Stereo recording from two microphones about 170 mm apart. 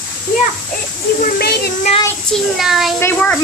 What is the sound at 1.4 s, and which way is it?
Speech, 65° left (ahead or behind).